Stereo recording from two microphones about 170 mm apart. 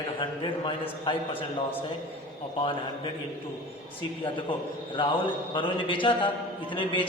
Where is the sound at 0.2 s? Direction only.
30° left (ahead or behind).